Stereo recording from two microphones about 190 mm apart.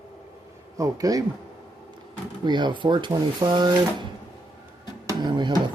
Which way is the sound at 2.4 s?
25° right (ahead or behind).